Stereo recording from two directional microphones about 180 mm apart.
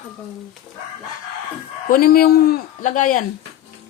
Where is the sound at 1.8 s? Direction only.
55° left (ahead or behind).